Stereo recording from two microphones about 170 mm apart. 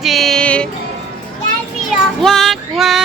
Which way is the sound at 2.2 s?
Centre (ahead or behind).